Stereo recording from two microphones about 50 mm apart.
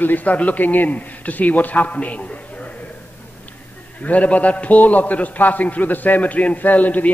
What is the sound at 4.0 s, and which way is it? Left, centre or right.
A man's voice, left.